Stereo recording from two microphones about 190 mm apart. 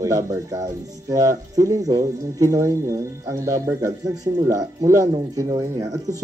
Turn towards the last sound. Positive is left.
turn(degrees=-20)  # may be behind; listen again after turning